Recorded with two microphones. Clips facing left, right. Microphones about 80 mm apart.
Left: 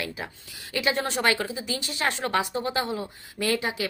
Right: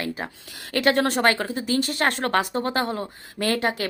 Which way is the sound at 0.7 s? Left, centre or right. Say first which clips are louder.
Right 6 dB; right.